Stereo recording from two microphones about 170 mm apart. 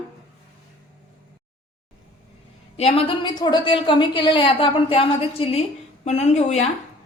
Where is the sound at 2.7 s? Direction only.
35° left (ahead or behind).